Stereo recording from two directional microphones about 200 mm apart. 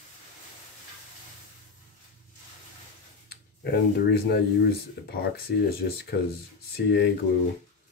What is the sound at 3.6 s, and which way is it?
Speech, 55° left (ahead or behind).